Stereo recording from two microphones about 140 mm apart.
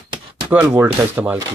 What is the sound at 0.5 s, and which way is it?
Speech, 15° right (ahead or behind).